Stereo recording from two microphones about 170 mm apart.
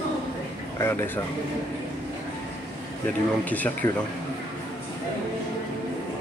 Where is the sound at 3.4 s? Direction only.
10° left (ahead or behind).